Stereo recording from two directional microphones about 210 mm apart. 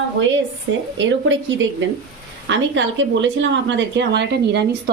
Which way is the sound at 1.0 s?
60° right (ahead or behind).